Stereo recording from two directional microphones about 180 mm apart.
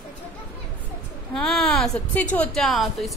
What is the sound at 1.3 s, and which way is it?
A woman's voice, 5° left (ahead or behind).